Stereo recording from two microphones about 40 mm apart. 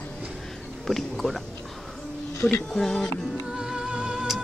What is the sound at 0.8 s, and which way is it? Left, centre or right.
Speech, centre.